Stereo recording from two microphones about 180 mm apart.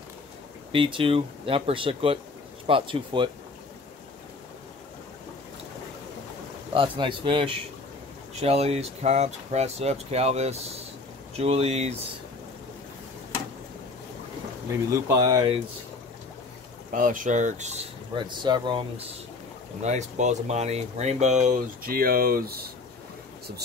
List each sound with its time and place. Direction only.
0.7 s speech: 30° right (ahead or behind)
6.7 s speech: 30° right (ahead or behind)
14.7 s speech: 15° right (ahead or behind)
16.9 s speech: 50° right (ahead or behind)
18.1 s speech: 25° right (ahead or behind); by 22.7 s 55° right (ahead or behind)